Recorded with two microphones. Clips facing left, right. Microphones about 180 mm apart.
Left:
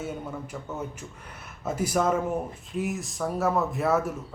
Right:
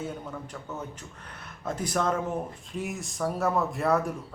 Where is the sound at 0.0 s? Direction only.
10° left (ahead or behind).